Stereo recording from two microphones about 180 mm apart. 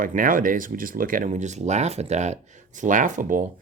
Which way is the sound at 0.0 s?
50° right (ahead or behind).